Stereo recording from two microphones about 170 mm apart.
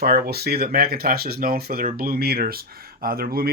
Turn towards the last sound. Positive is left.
turn(degrees=-60)  # may be behind; listen again after turning